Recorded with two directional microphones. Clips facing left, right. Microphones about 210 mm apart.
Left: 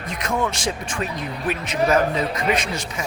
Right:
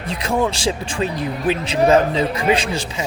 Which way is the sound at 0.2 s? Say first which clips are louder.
Right 4 dB; 30° right (ahead or behind).